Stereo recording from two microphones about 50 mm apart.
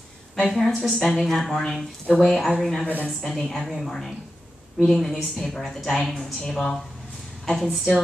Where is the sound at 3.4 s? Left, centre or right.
Centre.